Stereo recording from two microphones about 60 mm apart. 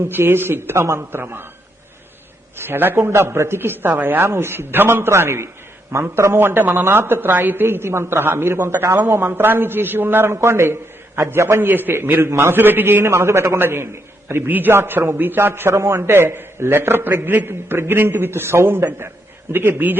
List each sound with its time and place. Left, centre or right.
0.0 s a man's voice: right
2.6 s a man's voice: right
11.6 s a man's voice: right